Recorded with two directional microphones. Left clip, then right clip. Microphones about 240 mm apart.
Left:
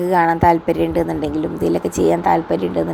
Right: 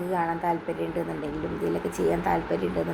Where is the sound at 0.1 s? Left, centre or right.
Left.